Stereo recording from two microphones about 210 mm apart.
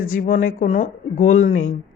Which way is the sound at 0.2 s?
40° left (ahead or behind).